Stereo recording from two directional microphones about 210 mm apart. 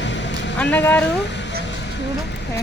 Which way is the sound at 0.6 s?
5° left (ahead or behind).